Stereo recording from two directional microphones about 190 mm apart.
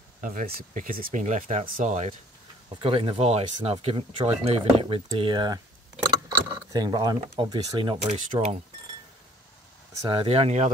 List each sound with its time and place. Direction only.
0.2 s speech: 45° right (ahead or behind); by 5.6 s 25° right (ahead or behind)
6.7 s speech: 20° right (ahead or behind)
10.0 s speech: 30° right (ahead or behind)